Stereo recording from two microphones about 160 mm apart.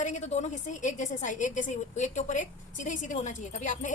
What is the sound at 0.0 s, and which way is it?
A woman's voice, 45° left (ahead or behind).